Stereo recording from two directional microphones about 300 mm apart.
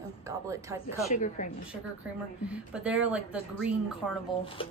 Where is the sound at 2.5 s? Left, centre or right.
Centre.